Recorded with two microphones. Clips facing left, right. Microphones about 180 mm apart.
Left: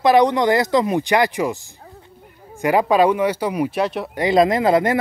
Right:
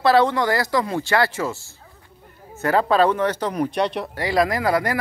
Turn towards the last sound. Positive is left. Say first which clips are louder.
# left 5 dB
turn(degrees=20)  # may be behind; listen again after turning